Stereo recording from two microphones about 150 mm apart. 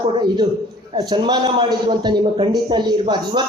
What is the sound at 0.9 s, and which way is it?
A man's voice, 30° right (ahead or behind).